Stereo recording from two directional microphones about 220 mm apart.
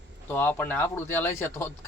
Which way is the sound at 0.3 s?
10° left (ahead or behind).